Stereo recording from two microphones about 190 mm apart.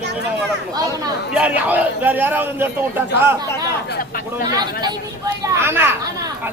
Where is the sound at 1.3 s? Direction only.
5° right (ahead or behind).